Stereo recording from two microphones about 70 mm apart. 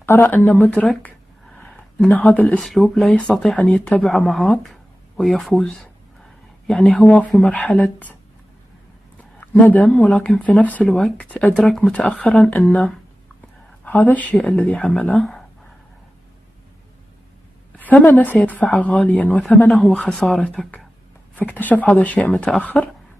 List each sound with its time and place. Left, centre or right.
0.0 s speech: left
2.0 s speech: left
2.6 s speech: centre
4.1 s speech: centre
6.7 s speech: left
9.4 s speech: left
9.8 s speech: centre; by 10.9 s left
10.9 s speech: centre
11.1 s speech: centre
11.5 s speech: centre
11.9 s speech: centre
13.8 s speech: left; by 15.4 s centre
17.7 s speech: left